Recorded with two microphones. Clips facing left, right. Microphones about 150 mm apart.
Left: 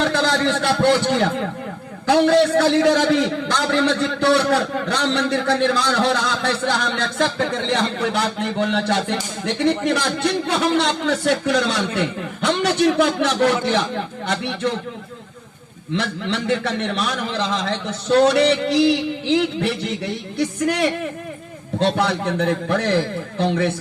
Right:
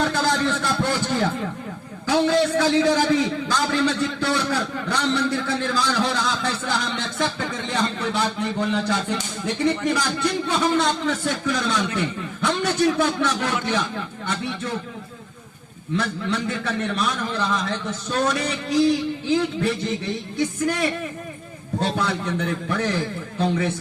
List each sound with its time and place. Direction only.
0.0 s a man's voice: 75° left (ahead or behind)
16.0 s a man's voice: 75° left (ahead or behind)